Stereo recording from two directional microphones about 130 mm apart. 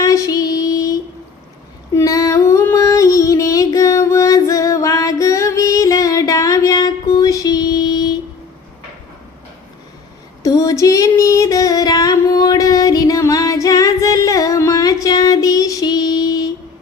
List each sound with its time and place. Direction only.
0.0 s music: 25° left (ahead or behind)
1.9 s a sound: 25° left (ahead or behind)
10.4 s female singing: 30° left (ahead or behind)
15.0 s child singing: 25° left (ahead or behind)